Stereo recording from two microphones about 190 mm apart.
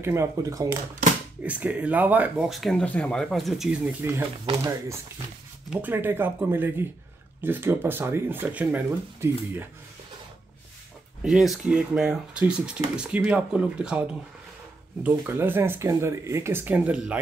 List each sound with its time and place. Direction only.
0.0 s speech: 15° right (ahead or behind)
1.4 s speech: 5° right (ahead or behind)
11.2 s speech: centre (ahead or behind)
15.0 s speech: 10° right (ahead or behind)